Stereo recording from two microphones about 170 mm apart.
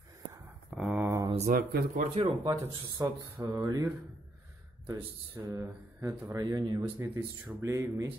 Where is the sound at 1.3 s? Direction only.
40° right (ahead or behind).